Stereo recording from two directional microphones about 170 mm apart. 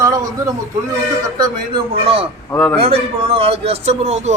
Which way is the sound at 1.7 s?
35° right (ahead or behind).